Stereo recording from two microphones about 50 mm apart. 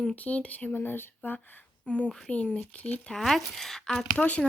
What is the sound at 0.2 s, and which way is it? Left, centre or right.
Speech, left.